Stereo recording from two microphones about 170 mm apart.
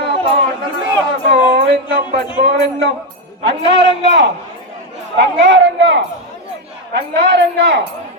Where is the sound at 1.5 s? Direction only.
90° right.